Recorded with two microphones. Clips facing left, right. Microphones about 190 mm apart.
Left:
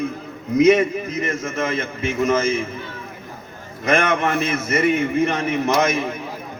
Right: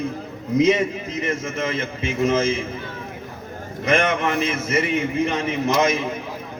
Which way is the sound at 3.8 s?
50° left (ahead or behind).